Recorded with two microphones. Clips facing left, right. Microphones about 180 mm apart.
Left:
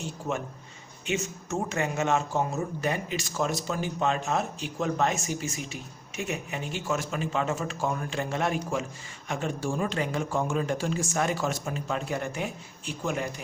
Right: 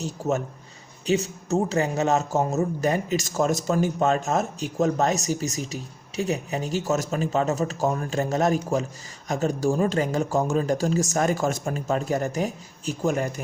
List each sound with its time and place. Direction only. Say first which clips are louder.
0.0 s speech: right 6 dB; 40° right (ahead or behind)